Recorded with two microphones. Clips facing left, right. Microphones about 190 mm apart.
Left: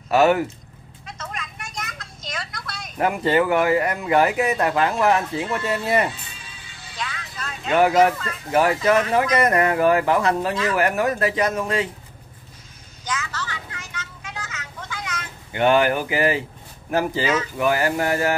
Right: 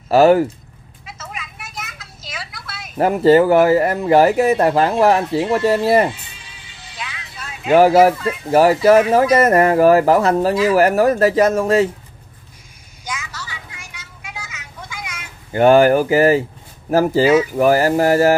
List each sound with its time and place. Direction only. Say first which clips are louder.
0.1 s speech: right 6 dB; 35° right (ahead or behind)
1.0 s vehicle: even; 5° right (ahead or behind)
3.0 s speech: right 8 dB; 35° right (ahead or behind)
7.0 s music: left 1 dB; 5° right (ahead or behind)
7.7 s speech: right 7 dB; 35° right (ahead or behind)
8.0 s speech: right 5 dB; 10° right (ahead or behind)
8.5 s speech: right 7 dB; 35° right (ahead or behind)
10.5 s speech: right 8 dB; 10° right (ahead or behind)
10.8 s speech: right 7 dB; 40° right (ahead or behind)
13.0 s vehicle: left 1 dB; 10° right (ahead or behind)
15.5 s speech: right 7 dB; 40° right (ahead or behind)